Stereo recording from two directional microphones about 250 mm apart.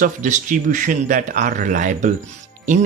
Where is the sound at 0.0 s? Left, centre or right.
Right.